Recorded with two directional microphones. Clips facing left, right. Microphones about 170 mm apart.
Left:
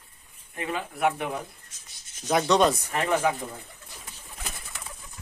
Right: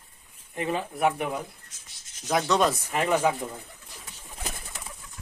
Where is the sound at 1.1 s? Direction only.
5° right (ahead or behind).